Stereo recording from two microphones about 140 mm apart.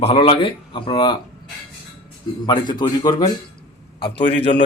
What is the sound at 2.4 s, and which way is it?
Speech, 30° left (ahead or behind).